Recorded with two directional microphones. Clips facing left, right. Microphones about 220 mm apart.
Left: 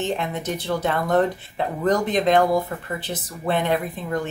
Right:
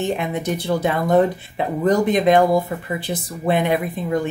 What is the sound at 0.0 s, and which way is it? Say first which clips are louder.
A woman's voice: right 3 dB; 10° right (ahead or behind).